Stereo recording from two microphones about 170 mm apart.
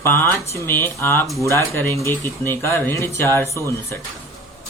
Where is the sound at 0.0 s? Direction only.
15° left (ahead or behind).